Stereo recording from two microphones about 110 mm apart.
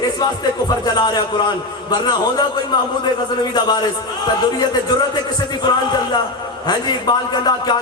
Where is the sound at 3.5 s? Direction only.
40° left (ahead or behind).